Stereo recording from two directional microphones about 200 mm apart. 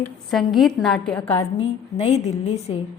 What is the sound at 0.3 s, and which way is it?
Speech, centre (ahead or behind).